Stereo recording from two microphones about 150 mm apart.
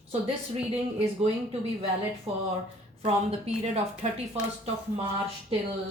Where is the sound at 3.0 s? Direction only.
45° right (ahead or behind).